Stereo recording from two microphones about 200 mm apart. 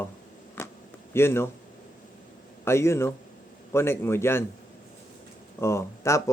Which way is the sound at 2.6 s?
15° left (ahead or behind).